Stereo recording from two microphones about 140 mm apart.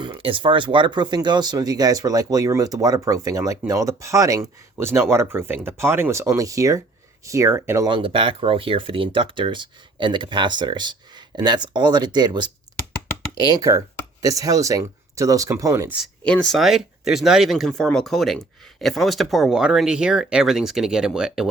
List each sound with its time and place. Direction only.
0.0 s speech: 40° right (ahead or behind); by 7.9 s 20° right (ahead or behind)
7.9 s speech: 35° right (ahead or behind)
13.5 s speech: 25° right (ahead or behind)
16.2 s speech: 5° left (ahead or behind)